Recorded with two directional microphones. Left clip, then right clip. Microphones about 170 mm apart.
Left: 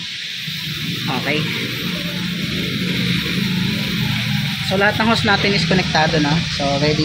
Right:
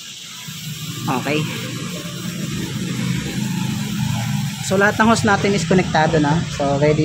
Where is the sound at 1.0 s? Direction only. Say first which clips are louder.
Right 1 dB; 20° right (ahead or behind).